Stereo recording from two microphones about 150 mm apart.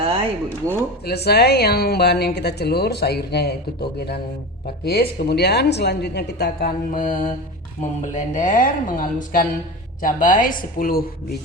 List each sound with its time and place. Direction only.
1.0 s a woman's voice: 90° left